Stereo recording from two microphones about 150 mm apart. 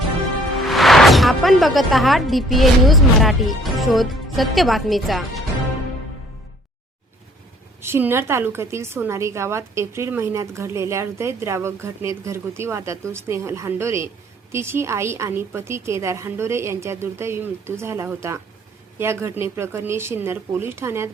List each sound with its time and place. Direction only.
0.6 s speech: centre (ahead or behind)
7.8 s a woman's voice: 15° right (ahead or behind)